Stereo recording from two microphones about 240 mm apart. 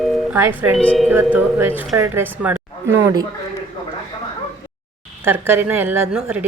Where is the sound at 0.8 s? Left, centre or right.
Centre.